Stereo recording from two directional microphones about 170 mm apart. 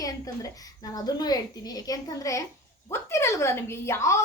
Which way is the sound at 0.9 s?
25° left (ahead or behind).